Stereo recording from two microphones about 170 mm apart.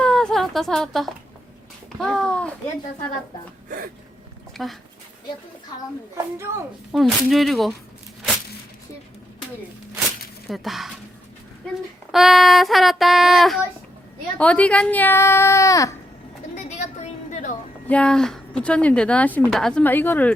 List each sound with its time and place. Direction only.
0.0 s a sound: 5° left (ahead or behind)
2.0 s child singing: 5° left (ahead or behind)
4.5 s speech: centre (ahead or behind)
6.9 s child singing: centre (ahead or behind)
10.5 s child singing: centre (ahead or behind)
12.1 s child singing: centre (ahead or behind)
14.3 s speech: 10° left (ahead or behind)
16.6 s a sound: 45° left (ahead or behind)
17.8 s speech: 5° left (ahead or behind)